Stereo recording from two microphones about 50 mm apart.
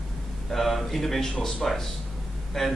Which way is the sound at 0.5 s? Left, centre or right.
Centre.